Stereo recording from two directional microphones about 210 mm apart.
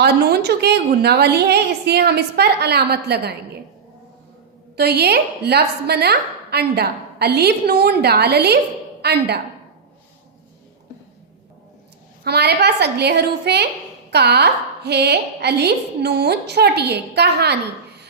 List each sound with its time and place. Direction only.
0.0 s a woman's voice: 50° right (ahead or behind)
4.8 s a woman's voice: 50° right (ahead or behind)
12.2 s a woman's voice: 50° right (ahead or behind)